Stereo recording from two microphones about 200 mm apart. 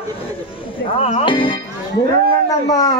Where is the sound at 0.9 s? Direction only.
30° left (ahead or behind).